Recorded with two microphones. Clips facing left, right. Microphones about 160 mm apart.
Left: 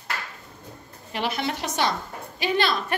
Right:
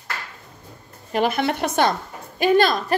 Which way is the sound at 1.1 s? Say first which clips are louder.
Right 7 dB; 50° right (ahead or behind).